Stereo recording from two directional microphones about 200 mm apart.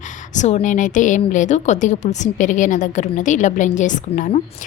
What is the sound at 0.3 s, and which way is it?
A woman's voice, 35° left (ahead or behind).